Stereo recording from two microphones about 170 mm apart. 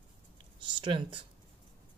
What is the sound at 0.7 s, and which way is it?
Speech, 30° right (ahead or behind).